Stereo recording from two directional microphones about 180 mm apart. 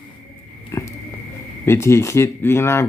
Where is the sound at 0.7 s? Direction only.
15° left (ahead or behind).